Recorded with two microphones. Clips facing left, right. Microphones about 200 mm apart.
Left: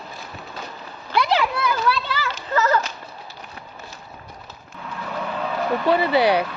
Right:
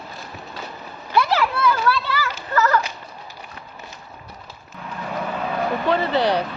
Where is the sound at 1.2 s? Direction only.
15° left (ahead or behind).